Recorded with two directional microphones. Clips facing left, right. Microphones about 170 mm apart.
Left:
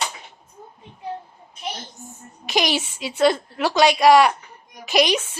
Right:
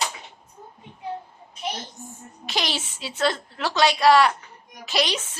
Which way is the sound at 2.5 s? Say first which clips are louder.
Left 6 dB; 15° left (ahead or behind).